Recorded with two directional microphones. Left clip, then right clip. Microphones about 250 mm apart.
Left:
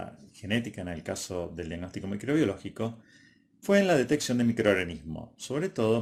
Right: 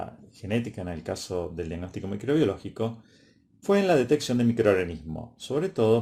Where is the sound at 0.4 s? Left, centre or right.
Left.